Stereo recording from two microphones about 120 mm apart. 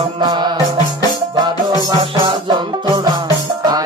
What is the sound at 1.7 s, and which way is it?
Music, 35° right (ahead or behind).